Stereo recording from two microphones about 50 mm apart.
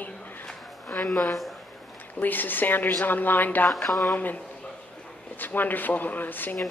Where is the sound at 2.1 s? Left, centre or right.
Left.